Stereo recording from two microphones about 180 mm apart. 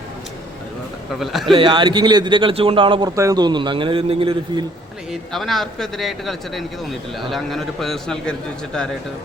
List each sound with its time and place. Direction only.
1.2 s a man's voice: centre (ahead or behind)
1.5 s a man's voice: 30° right (ahead or behind)
5.3 s a man's voice: centre (ahead or behind)